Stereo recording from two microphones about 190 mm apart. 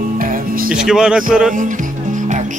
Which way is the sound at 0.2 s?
45° right (ahead or behind).